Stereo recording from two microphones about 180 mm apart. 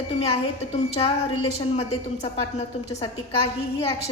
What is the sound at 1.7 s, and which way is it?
A woman's voice, 35° left (ahead or behind).